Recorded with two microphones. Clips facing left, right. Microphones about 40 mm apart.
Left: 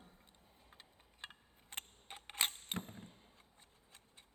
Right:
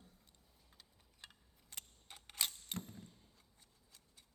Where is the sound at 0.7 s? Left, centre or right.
Left.